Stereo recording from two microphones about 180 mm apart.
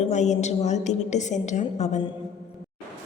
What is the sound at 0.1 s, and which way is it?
A woman's voice, 40° left (ahead or behind).